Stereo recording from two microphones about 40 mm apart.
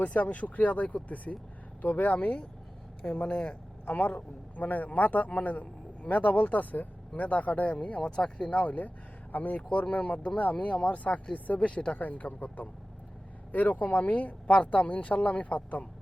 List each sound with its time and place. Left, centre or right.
0.0 s a man's voice: left
8.0 s speech: left
8.4 s a man's voice: left
9.6 s a man's voice: left
11.9 s a man's voice: left